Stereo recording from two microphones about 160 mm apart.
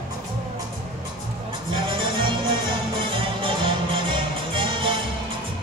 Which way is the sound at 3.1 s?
35° right (ahead or behind).